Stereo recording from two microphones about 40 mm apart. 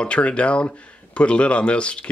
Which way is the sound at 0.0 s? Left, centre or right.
Left.